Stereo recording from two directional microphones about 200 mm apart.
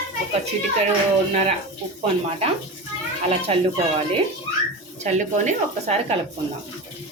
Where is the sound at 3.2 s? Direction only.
30° right (ahead or behind).